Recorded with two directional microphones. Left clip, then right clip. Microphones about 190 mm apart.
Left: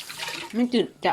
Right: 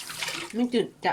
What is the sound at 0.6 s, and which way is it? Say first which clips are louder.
Speech: left 3 dB; 30° left (ahead or behind).